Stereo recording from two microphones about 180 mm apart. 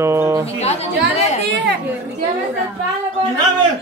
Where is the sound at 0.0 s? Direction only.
15° right (ahead or behind).